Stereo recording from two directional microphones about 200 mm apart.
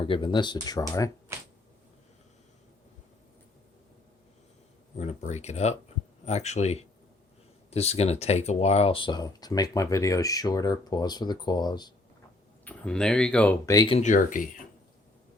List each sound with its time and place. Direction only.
0.0 s speech: 25° left (ahead or behind)
4.9 s speech: 35° left (ahead or behind)
12.6 s speech: 5° left (ahead or behind)
13.7 s speech: 30° left (ahead or behind)